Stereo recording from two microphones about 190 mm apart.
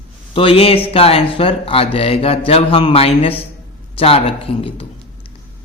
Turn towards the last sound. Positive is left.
turn(degrees=30)  # may be behind; listen again after turning